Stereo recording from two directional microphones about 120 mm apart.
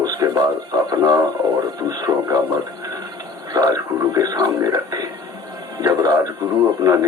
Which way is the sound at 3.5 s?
30° right (ahead or behind).